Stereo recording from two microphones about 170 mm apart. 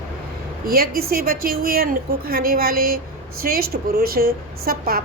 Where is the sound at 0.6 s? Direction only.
60° right (ahead or behind).